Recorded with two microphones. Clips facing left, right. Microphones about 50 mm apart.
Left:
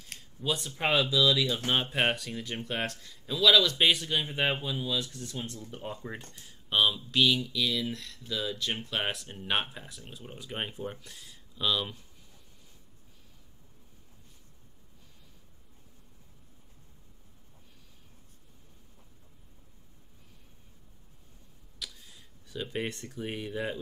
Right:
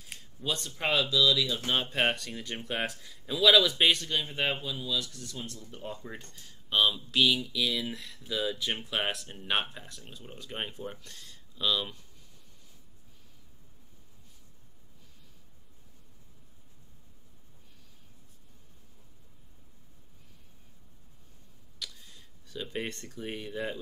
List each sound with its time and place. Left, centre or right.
0.0 s speech: centre
4.0 s speech: centre
5.7 s speech: centre
21.7 s speech: centre